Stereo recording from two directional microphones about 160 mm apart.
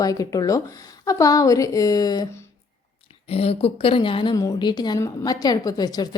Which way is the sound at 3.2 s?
40° left (ahead or behind).